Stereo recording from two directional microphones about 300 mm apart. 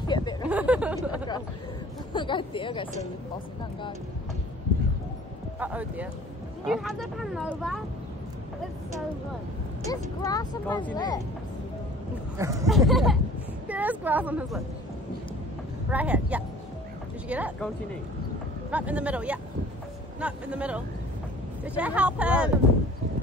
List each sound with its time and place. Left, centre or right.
0.0 s a sound: centre
0.5 s a sound: centre
2.1 s speech: centre
5.6 s speech: centre
9.8 s speech: centre
12.4 s speech: centre
12.6 s speech: centre
15.9 s speech: centre
18.7 s speech: centre